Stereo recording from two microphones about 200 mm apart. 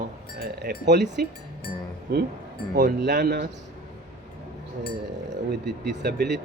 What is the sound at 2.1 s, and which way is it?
Speech, 55° right (ahead or behind).